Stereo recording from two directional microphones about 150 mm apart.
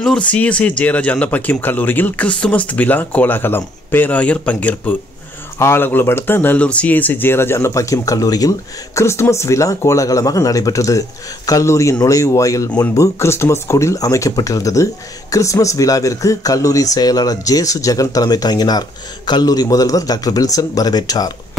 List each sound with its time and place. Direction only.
0.0 s speech: 5° left (ahead or behind); by 21.3 s 25° left (ahead or behind)